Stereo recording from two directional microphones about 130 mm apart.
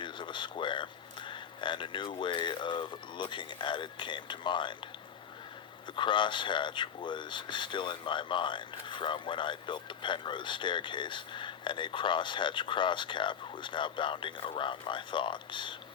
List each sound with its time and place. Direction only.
0.0 s a sound: 40° left (ahead or behind)
1.3 s speech: 40° left (ahead or behind)
6.0 s speech: 40° left (ahead or behind)